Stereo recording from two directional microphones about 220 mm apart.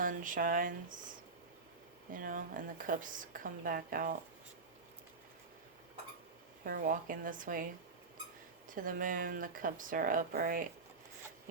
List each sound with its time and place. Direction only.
0.0 s a woman's voice: 40° right (ahead or behind)
2.1 s a woman's voice: 40° right (ahead or behind)
6.7 s a woman's voice: 40° right (ahead or behind)
8.7 s a woman's voice: 40° right (ahead or behind)